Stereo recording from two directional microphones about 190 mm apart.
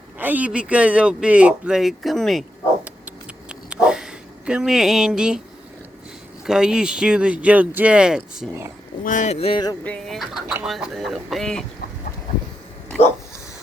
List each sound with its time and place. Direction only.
0.2 s speech: 10° right (ahead or behind)
3.7 s dog: 5° right (ahead or behind)
6.4 s speech: 5° right (ahead or behind)
9.0 s speech: 40° left (ahead or behind)
9.8 s speech: 5° left (ahead or behind)